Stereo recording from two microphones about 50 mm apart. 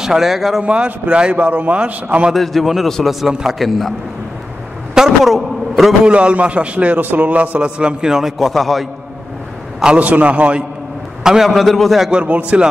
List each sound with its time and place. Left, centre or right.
0.0 s a man's voice: centre
0.6 s a man's voice: right
2.3 s a man's voice: centre
4.9 s a man's voice: centre
6.0 s a man's voice: right
7.0 s a man's voice: right; by 8.1 s centre
8.1 s a man's voice: centre
9.9 s a man's voice: right
11.4 s a man's voice: centre
12.3 s a man's voice: right